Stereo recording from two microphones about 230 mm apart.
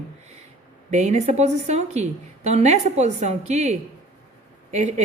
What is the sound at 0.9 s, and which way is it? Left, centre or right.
Speech, right.